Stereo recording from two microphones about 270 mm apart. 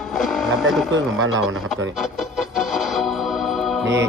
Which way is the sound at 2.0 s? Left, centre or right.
Centre.